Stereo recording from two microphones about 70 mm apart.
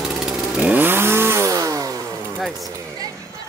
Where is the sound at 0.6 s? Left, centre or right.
Right.